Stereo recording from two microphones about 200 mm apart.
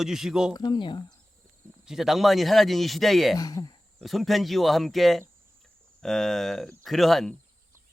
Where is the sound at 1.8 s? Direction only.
Centre (ahead or behind).